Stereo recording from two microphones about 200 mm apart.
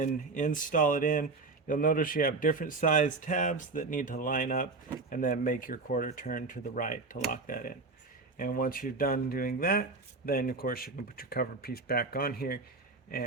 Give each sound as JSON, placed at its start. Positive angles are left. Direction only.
{"t": 0.0, "sound": "speech", "side_deg": 40}